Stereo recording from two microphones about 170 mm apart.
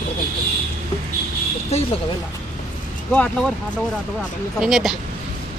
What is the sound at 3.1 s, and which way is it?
Speech, 10° left (ahead or behind).